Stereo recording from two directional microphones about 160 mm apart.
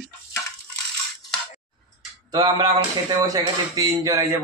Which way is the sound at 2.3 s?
20° right (ahead or behind).